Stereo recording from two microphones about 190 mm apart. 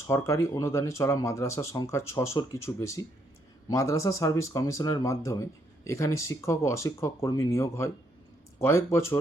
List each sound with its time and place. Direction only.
0.1 s speech: 15° left (ahead or behind)